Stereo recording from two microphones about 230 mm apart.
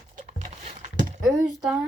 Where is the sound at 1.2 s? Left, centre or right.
Centre.